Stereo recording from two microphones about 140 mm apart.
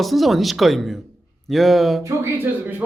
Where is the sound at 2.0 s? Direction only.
15° right (ahead or behind).